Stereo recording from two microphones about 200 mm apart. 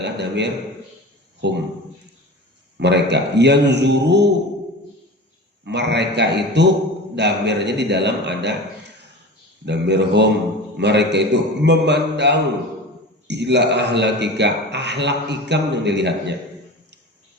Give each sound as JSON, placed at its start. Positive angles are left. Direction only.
{"t": 0.0, "sound": "a sound", "side_deg": -60}
{"t": 1.4, "sound": "a man's voice", "side_deg": -60}
{"t": 2.7, "sound": "a man's voice", "side_deg": -60}
{"t": 5.6, "sound": "a man's voice", "side_deg": -60}